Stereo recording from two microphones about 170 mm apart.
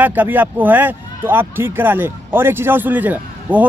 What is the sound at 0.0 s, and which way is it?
Speech, 10° right (ahead or behind).